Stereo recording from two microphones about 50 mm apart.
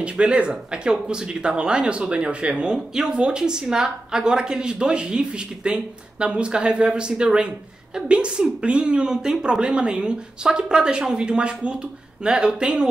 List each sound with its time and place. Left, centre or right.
0.0 s speech: right